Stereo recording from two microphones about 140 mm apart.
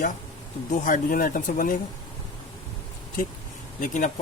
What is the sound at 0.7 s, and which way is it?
Speech, 70° left (ahead or behind).